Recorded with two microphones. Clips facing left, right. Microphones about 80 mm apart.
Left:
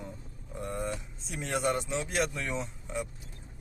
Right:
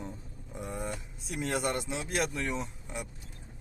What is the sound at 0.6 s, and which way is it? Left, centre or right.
Speech, centre.